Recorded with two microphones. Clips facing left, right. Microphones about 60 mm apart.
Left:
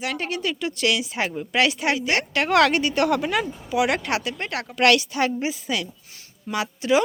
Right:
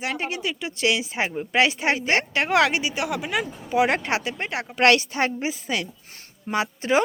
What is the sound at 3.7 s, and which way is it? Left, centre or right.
A woman's voice, right.